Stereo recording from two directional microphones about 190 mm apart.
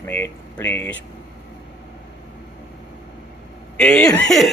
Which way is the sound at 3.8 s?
5° left (ahead or behind).